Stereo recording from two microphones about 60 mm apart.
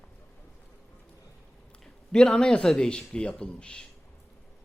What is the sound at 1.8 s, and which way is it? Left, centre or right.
A man's voice, centre.